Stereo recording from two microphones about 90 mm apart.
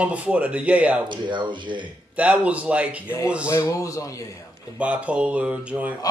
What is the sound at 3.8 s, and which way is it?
Speech, 35° left (ahead or behind).